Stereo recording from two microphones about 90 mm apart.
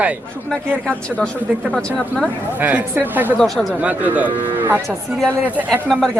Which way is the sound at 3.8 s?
15° right (ahead or behind).